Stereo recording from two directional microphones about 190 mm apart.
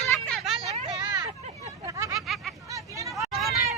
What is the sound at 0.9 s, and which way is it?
Hubbub, 25° right (ahead or behind).